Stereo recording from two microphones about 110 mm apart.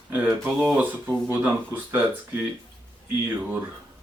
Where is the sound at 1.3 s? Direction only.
15° right (ahead or behind).